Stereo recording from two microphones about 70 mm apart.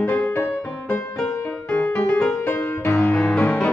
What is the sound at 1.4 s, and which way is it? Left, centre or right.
Music, left.